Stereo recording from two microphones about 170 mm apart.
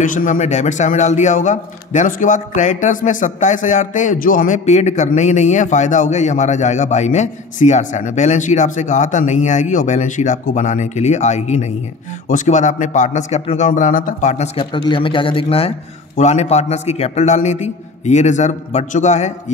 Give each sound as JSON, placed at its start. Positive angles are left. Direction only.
{"t": 0.0, "sound": "a man's voice", "side_deg": 50}
{"t": 14.7, "sound": "a man's voice", "side_deg": 25}